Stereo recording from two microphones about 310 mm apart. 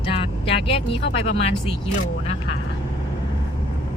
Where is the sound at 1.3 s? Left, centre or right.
Centre.